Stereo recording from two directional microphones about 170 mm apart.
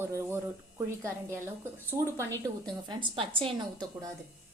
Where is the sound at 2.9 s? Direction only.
30° right (ahead or behind).